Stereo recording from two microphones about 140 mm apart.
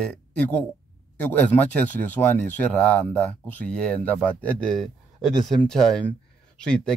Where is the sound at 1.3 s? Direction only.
15° left (ahead or behind).